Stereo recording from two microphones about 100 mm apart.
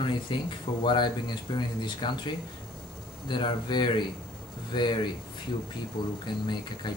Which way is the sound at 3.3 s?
50° left (ahead or behind).